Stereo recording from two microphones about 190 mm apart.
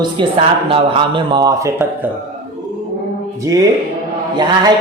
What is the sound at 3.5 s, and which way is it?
Speech, 15° right (ahead or behind).